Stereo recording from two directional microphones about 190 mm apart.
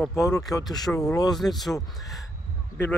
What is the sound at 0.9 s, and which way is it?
Speech, 5° left (ahead or behind).